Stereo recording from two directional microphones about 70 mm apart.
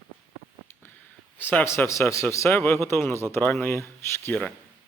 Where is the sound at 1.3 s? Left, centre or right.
Left.